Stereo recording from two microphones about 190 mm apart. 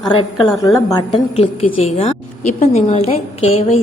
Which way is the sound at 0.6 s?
20° left (ahead or behind).